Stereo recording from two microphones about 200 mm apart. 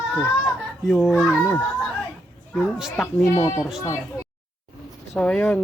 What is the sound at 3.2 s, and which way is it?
Speech, 15° left (ahead or behind).